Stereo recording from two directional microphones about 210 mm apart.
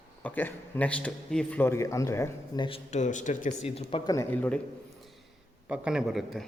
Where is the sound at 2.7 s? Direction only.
30° left (ahead or behind).